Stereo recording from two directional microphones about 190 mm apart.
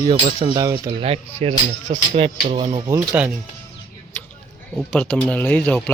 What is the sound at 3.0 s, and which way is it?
Speech, 5° right (ahead or behind).